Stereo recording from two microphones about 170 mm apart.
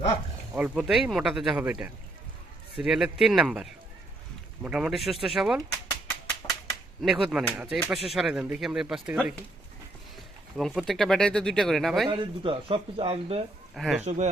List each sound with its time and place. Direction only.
0.5 s speech: 5° right (ahead or behind)
5.9 s a sound: 15° left (ahead or behind)
7.0 s speech: centre (ahead or behind)
10.6 s speech: centre (ahead or behind)
12.0 s speech: 30° right (ahead or behind)
13.7 s speech: centre (ahead or behind)
14.0 s speech: 40° right (ahead or behind)